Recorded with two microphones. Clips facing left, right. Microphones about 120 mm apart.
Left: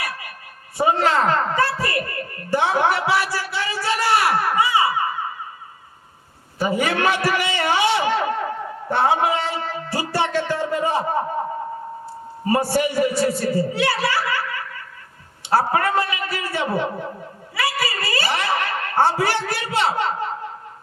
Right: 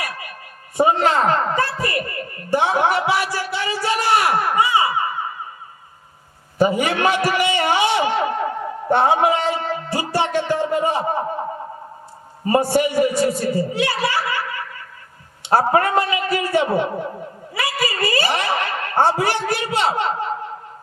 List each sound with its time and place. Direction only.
0.8 s a man's voice: 20° right (ahead or behind)
2.5 s a sound: 20° right (ahead or behind)
6.6 s a sound: 20° right (ahead or behind)
8.9 s music: 20° right (ahead or behind)
12.5 s a man's voice: 20° right (ahead or behind)
17.6 s chuckle: 20° right (ahead or behind)